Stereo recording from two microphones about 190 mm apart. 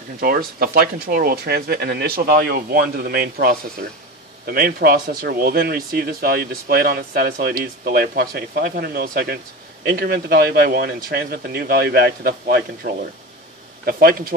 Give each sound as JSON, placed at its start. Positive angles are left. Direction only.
{"t": 0.2, "sound": "speech", "side_deg": -50}
{"t": 13.8, "sound": "speech", "side_deg": -50}